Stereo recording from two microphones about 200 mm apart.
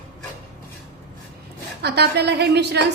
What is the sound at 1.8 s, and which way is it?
A woman's voice, 55° right (ahead or behind).